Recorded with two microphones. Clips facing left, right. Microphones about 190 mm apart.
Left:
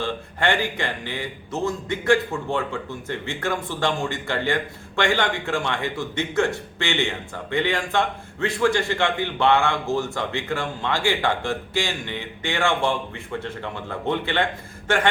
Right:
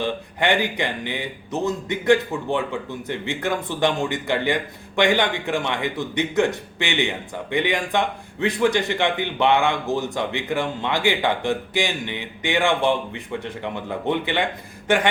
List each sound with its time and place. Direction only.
0.0 s speech: 15° right (ahead or behind)